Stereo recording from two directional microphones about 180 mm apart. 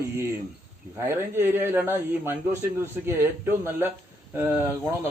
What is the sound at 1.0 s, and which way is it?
A man's voice, 10° right (ahead or behind).